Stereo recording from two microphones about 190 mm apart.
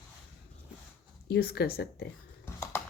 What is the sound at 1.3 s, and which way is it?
Speech, 55° left (ahead or behind).